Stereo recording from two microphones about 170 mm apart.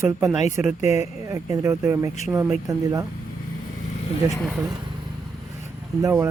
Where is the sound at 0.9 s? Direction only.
20° right (ahead or behind).